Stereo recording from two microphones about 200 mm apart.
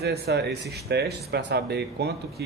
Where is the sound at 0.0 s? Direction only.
55° right (ahead or behind).